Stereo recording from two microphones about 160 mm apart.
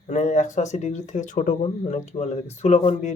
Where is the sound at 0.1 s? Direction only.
50° left (ahead or behind).